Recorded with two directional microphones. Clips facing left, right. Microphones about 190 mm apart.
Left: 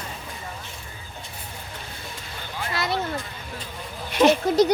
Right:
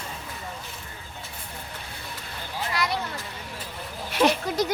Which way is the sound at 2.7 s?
25° left (ahead or behind).